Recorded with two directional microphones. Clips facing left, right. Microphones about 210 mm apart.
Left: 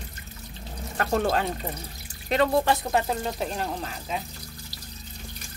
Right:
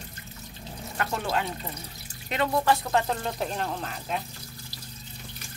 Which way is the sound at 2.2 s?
40° left (ahead or behind).